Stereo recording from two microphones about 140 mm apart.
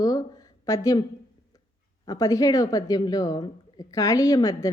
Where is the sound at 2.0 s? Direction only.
25° left (ahead or behind).